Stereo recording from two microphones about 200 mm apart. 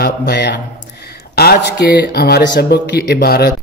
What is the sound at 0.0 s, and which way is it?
A man's voice, 55° left (ahead or behind).